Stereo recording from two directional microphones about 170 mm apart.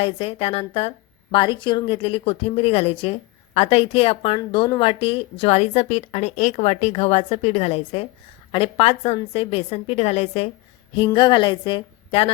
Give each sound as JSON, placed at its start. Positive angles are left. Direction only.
{"t": 0.0, "sound": "a woman's voice", "side_deg": 35}